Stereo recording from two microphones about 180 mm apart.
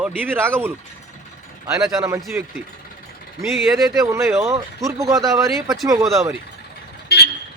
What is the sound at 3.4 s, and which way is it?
Speech, centre (ahead or behind).